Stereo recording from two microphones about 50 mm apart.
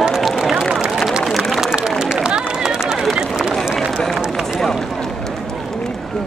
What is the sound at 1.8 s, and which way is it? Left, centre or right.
Run, centre.